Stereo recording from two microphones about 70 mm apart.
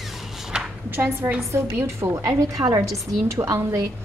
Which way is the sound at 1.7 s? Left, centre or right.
Right.